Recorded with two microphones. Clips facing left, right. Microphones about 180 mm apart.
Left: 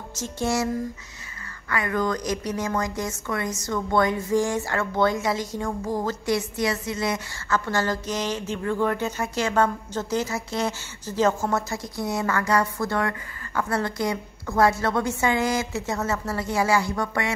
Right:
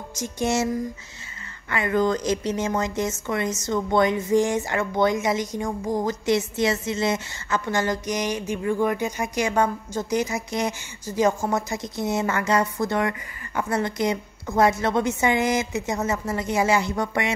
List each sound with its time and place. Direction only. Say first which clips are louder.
0.1 s music: right 1 dB; 15° right (ahead or behind)
1.7 s a woman's voice: right 3 dB; 25° right (ahead or behind)